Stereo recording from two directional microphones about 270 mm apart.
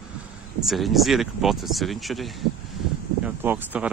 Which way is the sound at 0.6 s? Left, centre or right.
Centre.